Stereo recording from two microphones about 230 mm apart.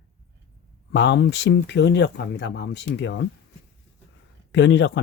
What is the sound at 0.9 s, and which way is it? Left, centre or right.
Speech, left.